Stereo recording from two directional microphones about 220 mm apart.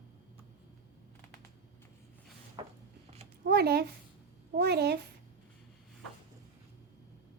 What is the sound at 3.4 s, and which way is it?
A woman's voice, 45° right (ahead or behind).